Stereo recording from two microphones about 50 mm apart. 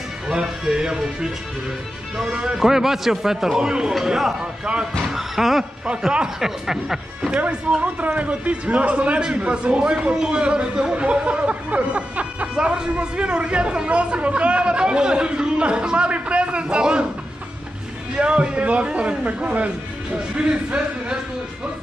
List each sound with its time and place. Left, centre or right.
0.3 s a man's voice: centre
5.0 s a man's voice: centre
7.8 s speech: right
18.1 s speech: right